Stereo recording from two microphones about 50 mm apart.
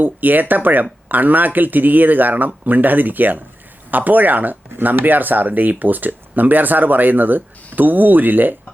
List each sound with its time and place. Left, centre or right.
0.0 s speech: right